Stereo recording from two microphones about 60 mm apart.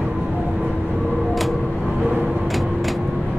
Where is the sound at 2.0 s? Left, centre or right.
Centre.